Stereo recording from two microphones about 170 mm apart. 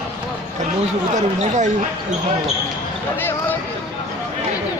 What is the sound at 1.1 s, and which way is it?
Speech, 45° right (ahead or behind).